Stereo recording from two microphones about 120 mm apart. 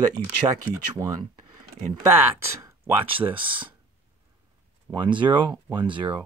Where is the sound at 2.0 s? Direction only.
20° right (ahead or behind).